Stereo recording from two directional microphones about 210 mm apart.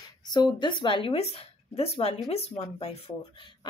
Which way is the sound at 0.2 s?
20° left (ahead or behind).